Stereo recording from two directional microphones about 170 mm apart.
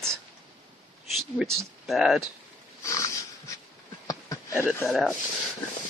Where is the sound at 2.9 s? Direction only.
15° left (ahead or behind).